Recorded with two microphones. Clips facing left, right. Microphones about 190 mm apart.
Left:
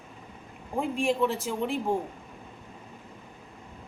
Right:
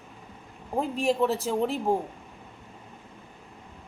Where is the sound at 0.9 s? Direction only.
40° right (ahead or behind).